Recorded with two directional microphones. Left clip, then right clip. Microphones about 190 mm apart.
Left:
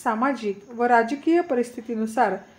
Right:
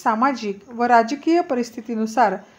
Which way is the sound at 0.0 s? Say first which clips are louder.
Right 4 dB; 35° right (ahead or behind).